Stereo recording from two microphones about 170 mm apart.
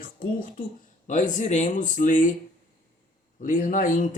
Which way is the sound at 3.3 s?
50° left (ahead or behind).